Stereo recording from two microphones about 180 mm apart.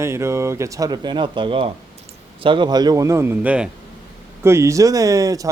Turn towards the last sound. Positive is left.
turn(degrees=-20)  # may be behind; listen again after turning